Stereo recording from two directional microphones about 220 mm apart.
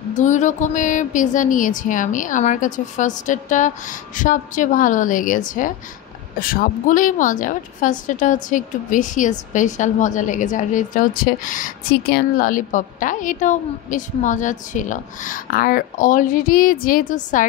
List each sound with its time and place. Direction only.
0.1 s a woman's voice: 35° left (ahead or behind)